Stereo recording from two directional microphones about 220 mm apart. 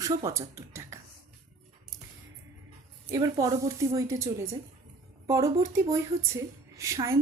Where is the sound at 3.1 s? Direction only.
15° right (ahead or behind).